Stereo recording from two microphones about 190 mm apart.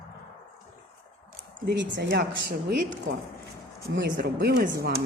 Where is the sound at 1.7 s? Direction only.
65° right (ahead or behind).